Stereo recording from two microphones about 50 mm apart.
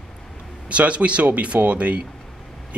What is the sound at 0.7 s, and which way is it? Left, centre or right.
Speech, right.